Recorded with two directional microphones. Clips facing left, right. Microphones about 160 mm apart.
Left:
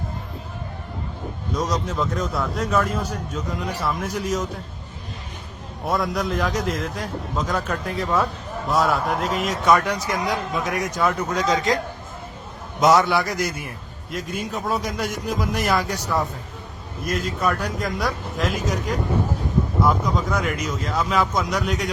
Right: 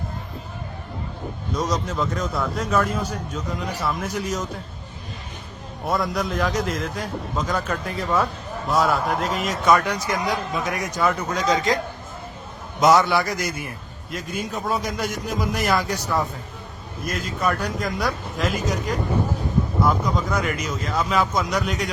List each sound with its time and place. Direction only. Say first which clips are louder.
1.5 s a man's voice: even; centre (ahead or behind)
5.8 s a man's voice: even; centre (ahead or behind)
12.8 s a man's voice: even; centre (ahead or behind)